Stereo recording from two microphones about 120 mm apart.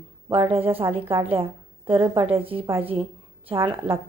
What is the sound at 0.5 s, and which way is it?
A woman's voice, 50° right (ahead or behind).